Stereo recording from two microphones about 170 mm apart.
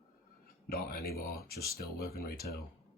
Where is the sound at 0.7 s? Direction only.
65° left (ahead or behind).